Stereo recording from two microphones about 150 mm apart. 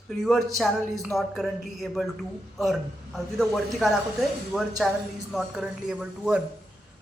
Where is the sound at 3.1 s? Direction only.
Centre (ahead or behind).